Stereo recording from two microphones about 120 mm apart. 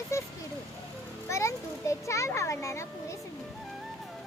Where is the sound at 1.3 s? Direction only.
25° left (ahead or behind).